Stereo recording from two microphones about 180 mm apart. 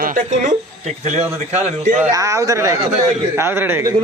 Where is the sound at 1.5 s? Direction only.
40° right (ahead or behind).